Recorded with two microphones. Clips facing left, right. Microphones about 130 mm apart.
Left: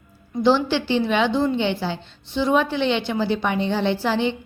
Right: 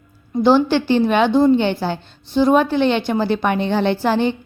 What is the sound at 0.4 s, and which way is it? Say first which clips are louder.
A woman's voice: right 4 dB; 50° right (ahead or behind).